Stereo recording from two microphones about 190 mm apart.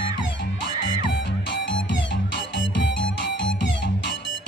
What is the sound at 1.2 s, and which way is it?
Music, 70° left (ahead or behind).